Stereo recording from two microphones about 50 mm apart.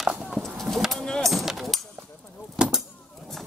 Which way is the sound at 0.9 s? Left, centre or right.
Centre.